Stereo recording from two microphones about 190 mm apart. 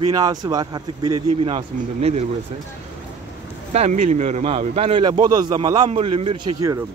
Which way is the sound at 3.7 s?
35° right (ahead or behind).